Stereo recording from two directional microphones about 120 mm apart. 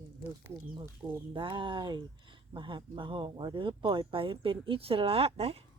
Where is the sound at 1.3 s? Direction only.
45° right (ahead or behind).